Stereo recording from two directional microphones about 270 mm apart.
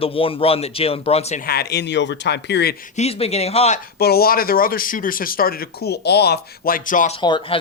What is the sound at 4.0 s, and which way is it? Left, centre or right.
Speech, left.